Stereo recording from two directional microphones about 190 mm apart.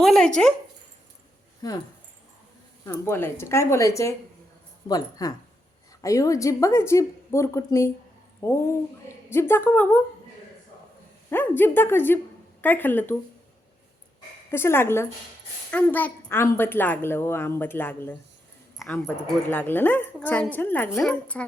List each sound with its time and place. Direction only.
0.0 s a sound: centre (ahead or behind)
2.8 s a woman's voice: 15° left (ahead or behind)
11.3 s a woman's voice: 10° left (ahead or behind)
14.5 s a woman's voice: 10° left (ahead or behind)